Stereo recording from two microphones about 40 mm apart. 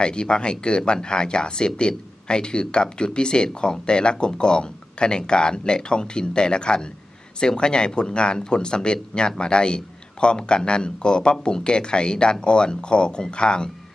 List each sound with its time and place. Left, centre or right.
0.0 s speech: left